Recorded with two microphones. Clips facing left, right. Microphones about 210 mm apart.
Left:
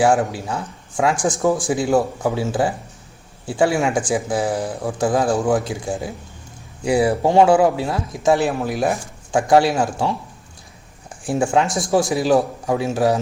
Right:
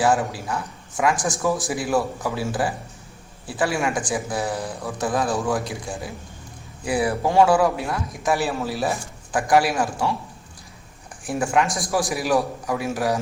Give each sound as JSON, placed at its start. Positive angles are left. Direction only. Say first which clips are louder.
{"t": 0.2, "sound": "speech", "louder": "left 4 dB", "side_deg": 25}
{"t": 11.3, "sound": "speech", "louder": "left 3 dB", "side_deg": 30}